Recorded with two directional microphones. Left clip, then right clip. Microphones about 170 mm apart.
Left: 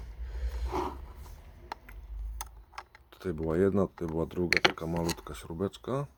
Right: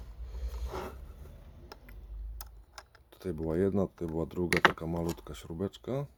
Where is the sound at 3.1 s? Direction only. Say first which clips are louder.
Left 2 dB; 10° right (ahead or behind).